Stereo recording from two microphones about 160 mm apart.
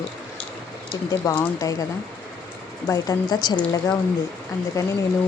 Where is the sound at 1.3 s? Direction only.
20° left (ahead or behind).